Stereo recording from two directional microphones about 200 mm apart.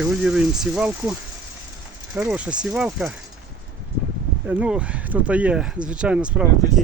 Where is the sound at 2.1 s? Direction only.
5° right (ahead or behind).